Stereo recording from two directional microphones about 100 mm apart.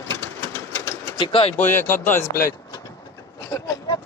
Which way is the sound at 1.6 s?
20° left (ahead or behind).